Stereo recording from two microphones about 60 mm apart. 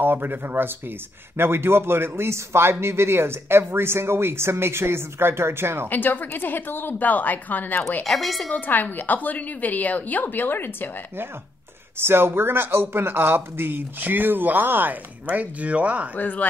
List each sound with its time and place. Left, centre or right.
0.0 s speech: right
5.9 s a woman's voice: left
8.0 s a woman's voice: centre
8.5 s a woman's voice: left
12.0 s speech: right
16.2 s a woman's voice: left